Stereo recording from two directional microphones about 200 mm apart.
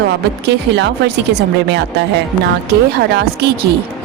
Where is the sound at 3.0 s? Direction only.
55° right (ahead or behind).